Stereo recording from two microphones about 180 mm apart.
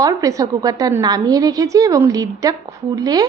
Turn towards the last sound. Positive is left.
turn(degrees=-20)  # may be behind; listen again after turning